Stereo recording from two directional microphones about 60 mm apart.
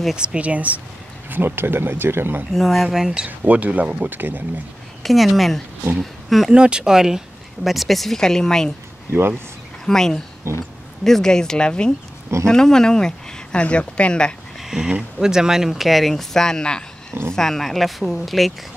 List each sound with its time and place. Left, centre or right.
0.1 s speech: centre
1.3 s speech: right
2.5 s speech: centre
3.3 s speech: right
5.0 s speech: centre
6.5 s speech: centre
9.1 s speech: right
9.8 s speech: centre
14.6 s speech: centre